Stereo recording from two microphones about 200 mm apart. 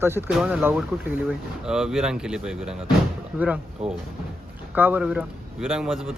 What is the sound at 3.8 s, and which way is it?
Speech, 30° right (ahead or behind).